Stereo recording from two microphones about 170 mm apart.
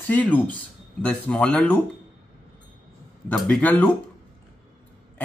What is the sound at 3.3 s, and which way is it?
Speech, 5° left (ahead or behind).